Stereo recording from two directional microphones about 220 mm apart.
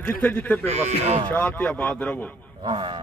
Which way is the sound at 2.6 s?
20° right (ahead or behind).